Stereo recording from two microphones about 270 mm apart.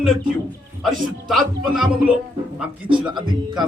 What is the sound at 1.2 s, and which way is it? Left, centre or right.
Speech, centre.